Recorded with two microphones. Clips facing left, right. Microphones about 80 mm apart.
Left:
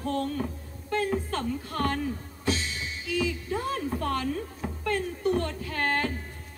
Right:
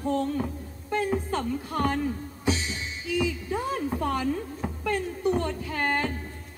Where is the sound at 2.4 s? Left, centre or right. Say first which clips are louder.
Right 1 dB; centre.